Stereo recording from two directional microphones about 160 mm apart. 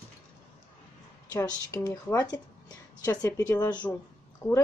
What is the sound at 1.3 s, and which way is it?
A woman's voice, 20° left (ahead or behind).